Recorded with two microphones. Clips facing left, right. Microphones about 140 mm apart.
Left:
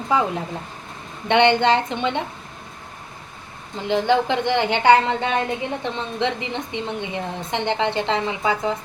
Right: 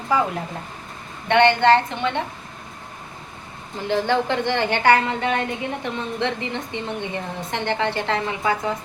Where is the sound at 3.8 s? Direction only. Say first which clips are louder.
Left 2 dB; 15° left (ahead or behind).